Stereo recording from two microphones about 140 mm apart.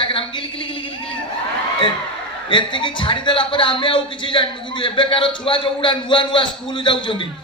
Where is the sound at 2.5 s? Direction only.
35° left (ahead or behind).